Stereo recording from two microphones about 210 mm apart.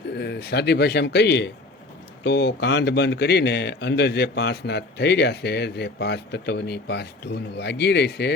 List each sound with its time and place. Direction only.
0.2 s a man's voice: 50° left (ahead or behind)